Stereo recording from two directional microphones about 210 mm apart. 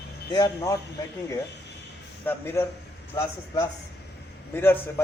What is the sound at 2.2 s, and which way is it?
A man's voice, 10° left (ahead or behind).